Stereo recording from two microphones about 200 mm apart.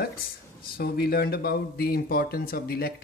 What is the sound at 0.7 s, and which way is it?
Speech, 50° left (ahead or behind).